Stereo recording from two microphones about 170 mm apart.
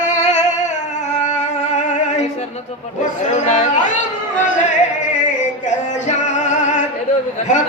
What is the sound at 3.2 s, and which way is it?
Speech, 45° left (ahead or behind).